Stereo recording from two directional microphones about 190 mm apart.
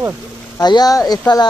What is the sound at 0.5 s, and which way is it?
Speech, 20° left (ahead or behind).